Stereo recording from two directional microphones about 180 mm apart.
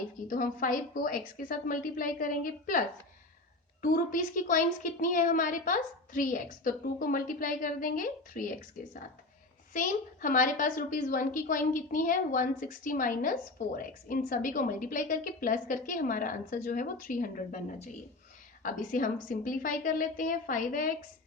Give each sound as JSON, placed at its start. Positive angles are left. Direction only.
{"t": 0.3, "sound": "a woman's voice", "side_deg": 50}